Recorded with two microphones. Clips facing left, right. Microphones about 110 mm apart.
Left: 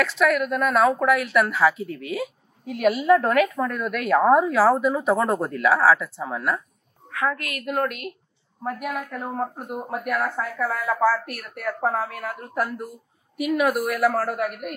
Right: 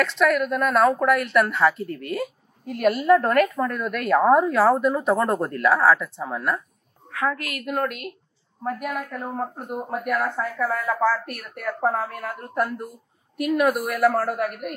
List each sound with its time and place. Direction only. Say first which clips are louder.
0.0 s a woman's voice: even; centre (ahead or behind)
7.2 s a woman's voice: even; 25° right (ahead or behind)
8.6 s a woman's voice: right 1 dB; 5° left (ahead or behind)